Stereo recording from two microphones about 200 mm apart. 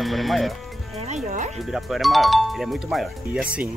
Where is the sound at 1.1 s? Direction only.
40° right (ahead or behind).